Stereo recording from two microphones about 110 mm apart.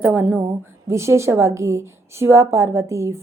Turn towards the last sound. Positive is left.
turn(degrees=-25)  # may be behind; listen again after turning